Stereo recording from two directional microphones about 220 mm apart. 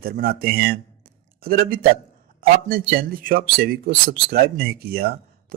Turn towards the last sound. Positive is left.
turn(degrees=-45)  # may be behind; listen again after turning